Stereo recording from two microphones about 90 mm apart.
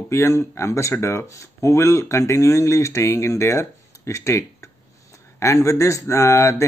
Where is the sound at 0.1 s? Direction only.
35° left (ahead or behind).